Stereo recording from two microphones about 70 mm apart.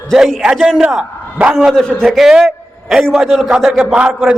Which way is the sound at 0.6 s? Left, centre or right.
Centre.